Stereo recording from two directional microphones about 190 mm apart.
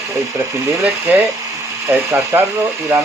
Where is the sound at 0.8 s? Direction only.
10° right (ahead or behind).